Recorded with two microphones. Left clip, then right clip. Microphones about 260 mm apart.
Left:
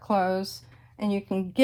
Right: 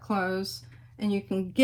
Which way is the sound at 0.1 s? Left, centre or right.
Left.